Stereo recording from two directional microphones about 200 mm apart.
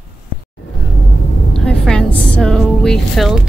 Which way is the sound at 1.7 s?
5° left (ahead or behind).